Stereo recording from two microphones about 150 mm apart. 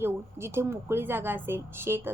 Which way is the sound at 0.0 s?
15° right (ahead or behind).